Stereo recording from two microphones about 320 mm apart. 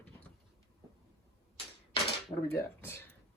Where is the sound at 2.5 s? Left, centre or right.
Centre.